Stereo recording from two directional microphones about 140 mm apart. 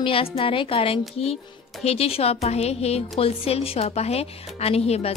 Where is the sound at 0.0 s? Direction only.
40° left (ahead or behind).